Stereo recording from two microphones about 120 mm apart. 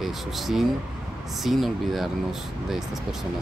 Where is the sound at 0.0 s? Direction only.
Centre (ahead or behind).